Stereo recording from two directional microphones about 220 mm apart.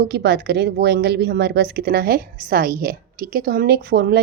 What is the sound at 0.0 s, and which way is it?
Speech, 50° right (ahead or behind).